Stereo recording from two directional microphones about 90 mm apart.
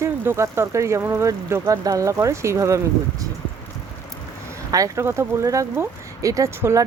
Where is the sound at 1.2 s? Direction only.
35° right (ahead or behind).